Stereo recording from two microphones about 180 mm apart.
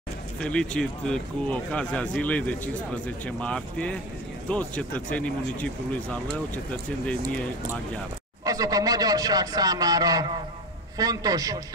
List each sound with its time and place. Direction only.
0.4 s speech: 5° left (ahead or behind)
8.5 s a man's voice: 20° right (ahead or behind)